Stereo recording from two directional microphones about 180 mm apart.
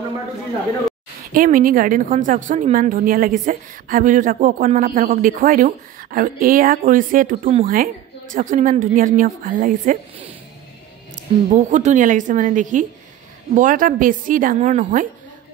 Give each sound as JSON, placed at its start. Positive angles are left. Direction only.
{"t": 1.3, "sound": "a woman's voice", "side_deg": -50}
{"t": 11.1, "sound": "a woman's voice", "side_deg": -45}